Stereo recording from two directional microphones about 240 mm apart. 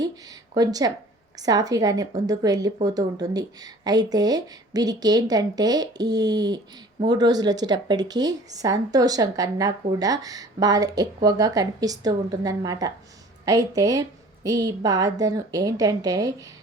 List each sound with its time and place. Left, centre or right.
0.5 s speech: centre